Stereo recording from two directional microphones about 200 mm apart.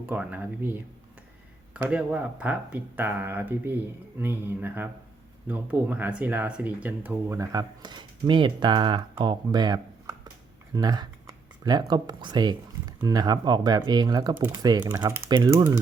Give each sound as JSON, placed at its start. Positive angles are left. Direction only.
{"t": 0.0, "sound": "speech", "side_deg": -5}